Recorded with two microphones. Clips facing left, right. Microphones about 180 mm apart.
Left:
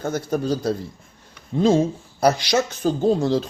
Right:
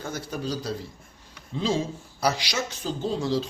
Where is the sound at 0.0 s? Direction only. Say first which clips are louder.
Left 8 dB; 50° left (ahead or behind).